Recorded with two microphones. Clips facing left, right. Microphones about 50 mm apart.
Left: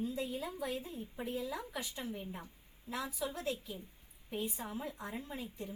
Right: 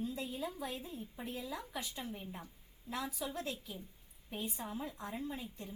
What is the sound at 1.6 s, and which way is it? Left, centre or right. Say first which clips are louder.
Speech: left 1 dB; centre.